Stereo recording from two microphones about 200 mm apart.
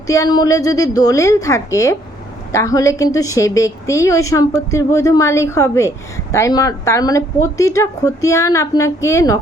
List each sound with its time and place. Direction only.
0.1 s a woman's voice: 20° left (ahead or behind)